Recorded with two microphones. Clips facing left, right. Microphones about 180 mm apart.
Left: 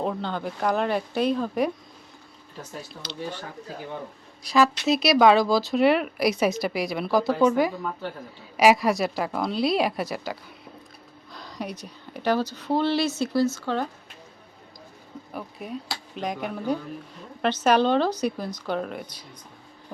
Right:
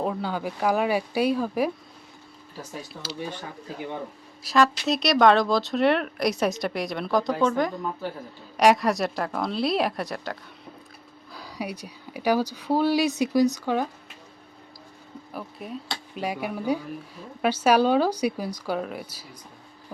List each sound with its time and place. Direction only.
0.0 s speech: 5° right (ahead or behind)
4.4 s speech: centre (ahead or behind)
11.3 s speech: 10° right (ahead or behind)
15.3 s speech: centre (ahead or behind)